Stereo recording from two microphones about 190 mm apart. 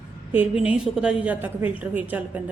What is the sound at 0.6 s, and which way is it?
A woman's voice, 5° right (ahead or behind).